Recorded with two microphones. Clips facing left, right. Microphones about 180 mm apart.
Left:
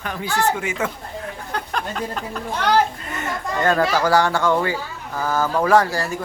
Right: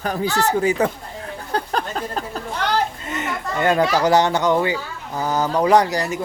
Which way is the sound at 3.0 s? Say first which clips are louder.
Right 1 dB; 20° right (ahead or behind).